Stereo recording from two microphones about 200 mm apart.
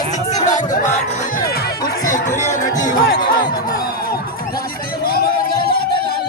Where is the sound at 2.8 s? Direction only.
45° left (ahead or behind).